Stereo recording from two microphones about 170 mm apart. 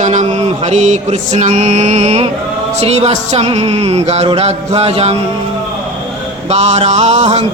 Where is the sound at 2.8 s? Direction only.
40° right (ahead or behind).